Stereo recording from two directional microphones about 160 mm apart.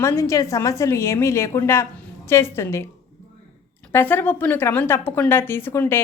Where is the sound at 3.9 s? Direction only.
10° left (ahead or behind).